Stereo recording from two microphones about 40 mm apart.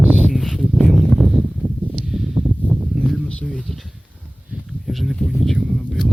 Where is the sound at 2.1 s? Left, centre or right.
Centre.